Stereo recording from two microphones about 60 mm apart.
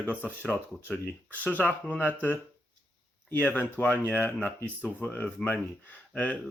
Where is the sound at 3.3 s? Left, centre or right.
Left.